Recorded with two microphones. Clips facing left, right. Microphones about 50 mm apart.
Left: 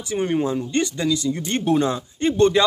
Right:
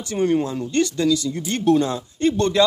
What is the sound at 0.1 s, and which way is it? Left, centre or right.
Speech, centre.